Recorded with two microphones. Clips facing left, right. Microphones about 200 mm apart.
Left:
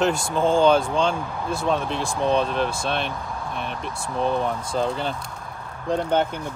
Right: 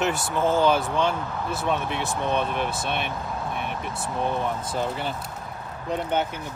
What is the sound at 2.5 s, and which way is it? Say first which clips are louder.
Speech: left 3 dB; 15° right (ahead or behind).